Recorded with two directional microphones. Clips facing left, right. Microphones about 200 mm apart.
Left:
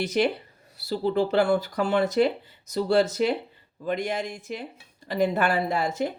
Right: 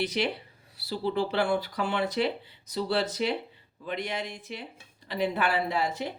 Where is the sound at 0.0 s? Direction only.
45° left (ahead or behind).